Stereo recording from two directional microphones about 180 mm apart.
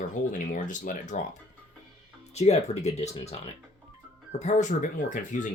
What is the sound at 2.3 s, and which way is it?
Speech, 35° left (ahead or behind).